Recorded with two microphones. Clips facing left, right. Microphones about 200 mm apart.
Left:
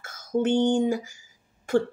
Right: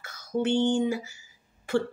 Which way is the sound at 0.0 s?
50° left (ahead or behind).